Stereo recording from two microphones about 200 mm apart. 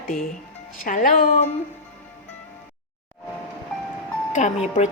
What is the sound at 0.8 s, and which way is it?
Speech, 40° left (ahead or behind).